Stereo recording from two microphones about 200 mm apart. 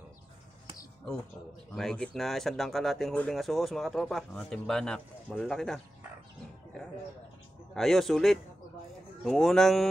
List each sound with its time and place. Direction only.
1.8 s speech: centre (ahead or behind)
7.7 s speech: centre (ahead or behind)